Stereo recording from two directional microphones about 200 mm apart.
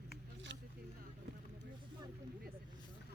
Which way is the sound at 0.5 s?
65° right (ahead or behind).